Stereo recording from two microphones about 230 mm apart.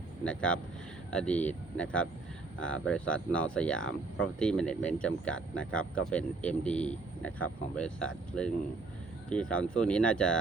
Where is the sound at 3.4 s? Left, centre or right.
Centre.